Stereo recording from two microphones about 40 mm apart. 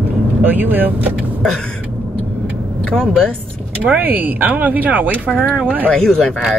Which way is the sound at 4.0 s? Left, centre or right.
Right.